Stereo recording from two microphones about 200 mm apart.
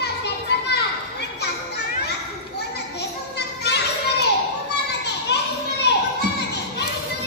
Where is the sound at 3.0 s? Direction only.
55° left (ahead or behind).